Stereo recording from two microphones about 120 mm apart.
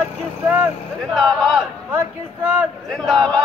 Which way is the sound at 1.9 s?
15° right (ahead or behind).